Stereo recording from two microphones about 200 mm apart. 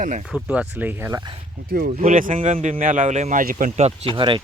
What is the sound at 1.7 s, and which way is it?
Speech, 50° right (ahead or behind).